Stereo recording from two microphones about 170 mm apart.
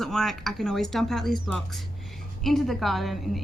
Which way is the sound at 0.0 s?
Centre (ahead or behind).